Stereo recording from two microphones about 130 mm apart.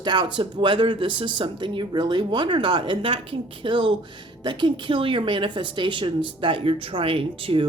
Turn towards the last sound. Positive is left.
turn(degrees=-45)  # may be behind; listen again after turning